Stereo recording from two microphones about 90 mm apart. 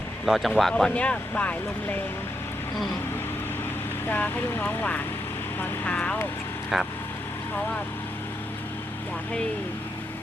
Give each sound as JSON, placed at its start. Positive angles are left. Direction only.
{"t": 0.3, "sound": "speech", "side_deg": 0}
{"t": 0.9, "sound": "speech", "side_deg": 15}
{"t": 4.0, "sound": "speech", "side_deg": 20}
{"t": 6.7, "sound": "speech", "side_deg": -5}